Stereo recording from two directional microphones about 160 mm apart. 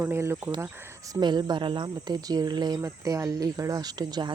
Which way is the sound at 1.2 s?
25° right (ahead or behind).